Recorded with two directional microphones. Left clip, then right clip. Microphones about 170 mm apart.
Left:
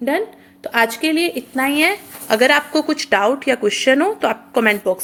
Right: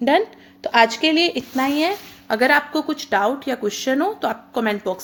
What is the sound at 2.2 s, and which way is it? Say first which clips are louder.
Speech: left 3 dB; 15° right (ahead or behind).